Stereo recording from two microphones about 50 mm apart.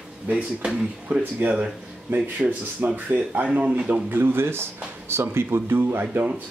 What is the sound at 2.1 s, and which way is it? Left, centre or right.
Speech, right.